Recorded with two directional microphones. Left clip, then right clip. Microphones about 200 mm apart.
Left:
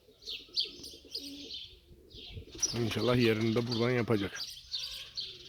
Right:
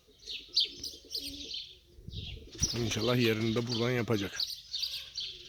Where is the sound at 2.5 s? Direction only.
35° right (ahead or behind).